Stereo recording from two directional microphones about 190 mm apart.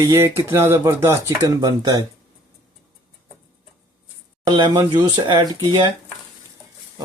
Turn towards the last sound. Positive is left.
turn(degrees=-20)  # may be behind; listen again after turning